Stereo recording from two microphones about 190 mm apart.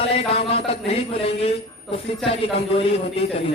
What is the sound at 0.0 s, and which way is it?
Speech, 30° left (ahead or behind).